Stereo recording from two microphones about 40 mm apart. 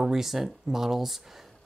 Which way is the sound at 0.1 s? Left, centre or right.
Centre.